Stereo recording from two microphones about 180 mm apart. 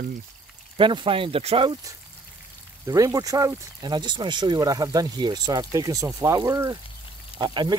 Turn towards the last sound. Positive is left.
turn(degrees=-25)  # may be behind; listen again after turning